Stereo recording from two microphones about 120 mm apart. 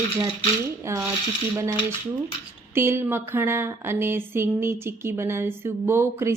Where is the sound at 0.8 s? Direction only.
20° right (ahead or behind).